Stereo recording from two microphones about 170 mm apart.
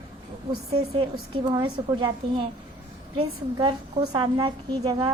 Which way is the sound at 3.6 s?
25° right (ahead or behind).